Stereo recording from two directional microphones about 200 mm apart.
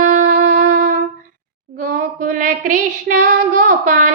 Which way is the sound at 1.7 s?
45° right (ahead or behind).